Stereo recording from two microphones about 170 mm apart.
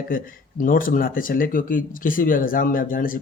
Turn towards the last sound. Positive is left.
turn(degrees=55)  # may be behind; listen again after turning